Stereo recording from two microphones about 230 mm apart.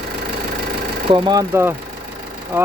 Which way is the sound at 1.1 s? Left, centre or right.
Centre.